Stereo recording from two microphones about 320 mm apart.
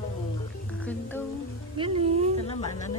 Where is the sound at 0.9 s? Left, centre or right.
Centre.